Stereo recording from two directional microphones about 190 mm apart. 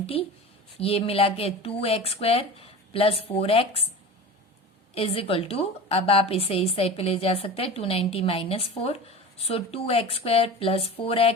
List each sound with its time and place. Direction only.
0.0 s a woman's voice: 30° left (ahead or behind)
4.9 s a woman's voice: 30° left (ahead or behind)